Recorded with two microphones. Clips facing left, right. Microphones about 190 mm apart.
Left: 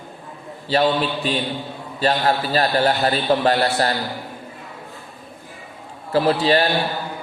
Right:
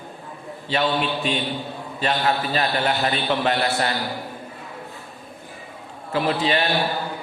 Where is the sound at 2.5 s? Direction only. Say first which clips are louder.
Left 4 dB; 40° left (ahead or behind).